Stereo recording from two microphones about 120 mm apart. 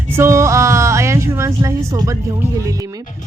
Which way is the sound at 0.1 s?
25° right (ahead or behind).